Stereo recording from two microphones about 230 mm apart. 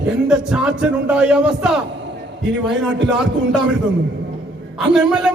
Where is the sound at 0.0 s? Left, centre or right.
Centre.